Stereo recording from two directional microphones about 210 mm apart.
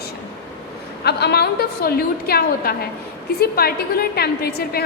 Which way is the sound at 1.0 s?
50° left (ahead or behind).